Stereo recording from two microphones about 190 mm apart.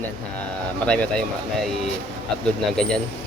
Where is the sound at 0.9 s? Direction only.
5° left (ahead or behind).